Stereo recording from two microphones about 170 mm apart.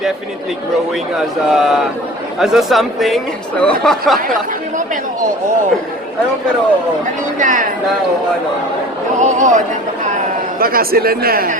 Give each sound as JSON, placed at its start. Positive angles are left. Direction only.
{"t": 1.1, "sound": "speech", "side_deg": 0}
{"t": 7.3, "sound": "speech", "side_deg": -50}
{"t": 9.2, "sound": "speech", "side_deg": -45}
{"t": 10.6, "sound": "speech", "side_deg": -60}